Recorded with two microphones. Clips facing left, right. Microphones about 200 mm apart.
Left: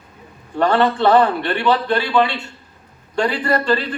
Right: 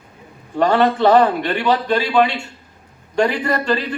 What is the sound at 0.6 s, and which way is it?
A man's voice, 15° right (ahead or behind).